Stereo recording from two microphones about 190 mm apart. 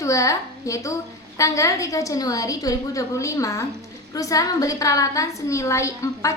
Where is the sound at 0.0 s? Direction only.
15° left (ahead or behind).